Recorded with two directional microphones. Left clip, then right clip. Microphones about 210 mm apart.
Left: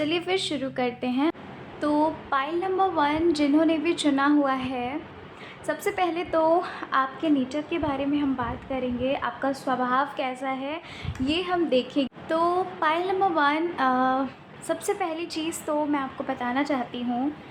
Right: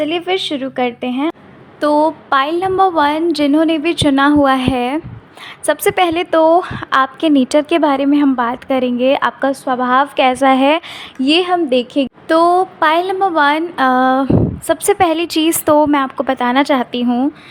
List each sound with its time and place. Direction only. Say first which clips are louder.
0.0 s a woman's voice: right 9 dB; 35° right (ahead or behind); by 17.2 s 55° right (ahead or behind)